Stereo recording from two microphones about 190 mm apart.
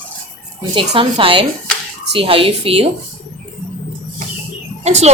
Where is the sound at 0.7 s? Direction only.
25° right (ahead or behind).